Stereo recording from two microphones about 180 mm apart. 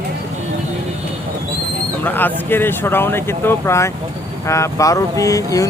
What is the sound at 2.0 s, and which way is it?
Speech, 10° left (ahead or behind).